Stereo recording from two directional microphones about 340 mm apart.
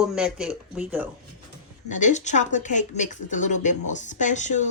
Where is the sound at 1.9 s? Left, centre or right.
Left.